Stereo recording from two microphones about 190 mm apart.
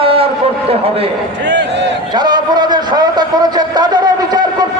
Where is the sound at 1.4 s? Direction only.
70° right (ahead or behind).